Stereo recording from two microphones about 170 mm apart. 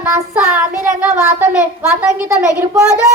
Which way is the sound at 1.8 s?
10° right (ahead or behind).